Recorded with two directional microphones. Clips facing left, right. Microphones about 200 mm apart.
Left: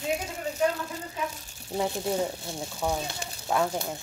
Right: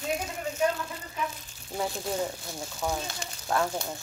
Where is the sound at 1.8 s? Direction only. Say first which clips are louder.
Left 3 dB; 25° left (ahead or behind).